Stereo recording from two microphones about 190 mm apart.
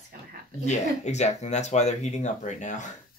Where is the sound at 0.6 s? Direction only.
40° left (ahead or behind).